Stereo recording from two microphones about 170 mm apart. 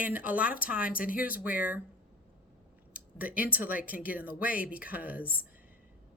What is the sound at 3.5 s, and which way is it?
Speech, 60° left (ahead or behind).